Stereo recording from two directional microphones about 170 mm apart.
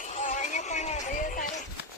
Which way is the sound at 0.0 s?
45° left (ahead or behind).